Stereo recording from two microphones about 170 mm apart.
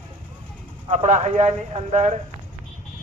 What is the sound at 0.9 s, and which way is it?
Speech, 40° right (ahead or behind).